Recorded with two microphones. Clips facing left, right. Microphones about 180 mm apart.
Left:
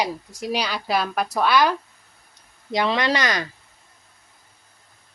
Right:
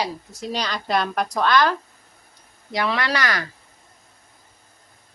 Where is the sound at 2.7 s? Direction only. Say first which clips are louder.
Left 2 dB; 20° left (ahead or behind).